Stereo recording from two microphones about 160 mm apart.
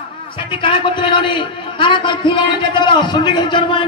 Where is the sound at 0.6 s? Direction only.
30° left (ahead or behind).